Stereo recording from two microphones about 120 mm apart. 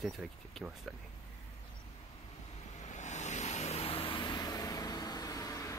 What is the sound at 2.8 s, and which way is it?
Vehicle, 80° left.